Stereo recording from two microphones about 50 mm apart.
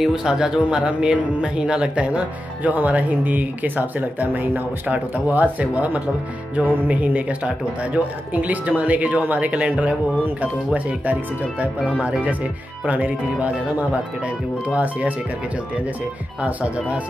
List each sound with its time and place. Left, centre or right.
0.0 s speech: centre; by 15.1 s right
16.3 s speech: right